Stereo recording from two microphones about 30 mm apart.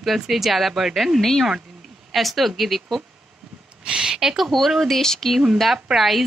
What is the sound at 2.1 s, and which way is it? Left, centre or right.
Speech, centre.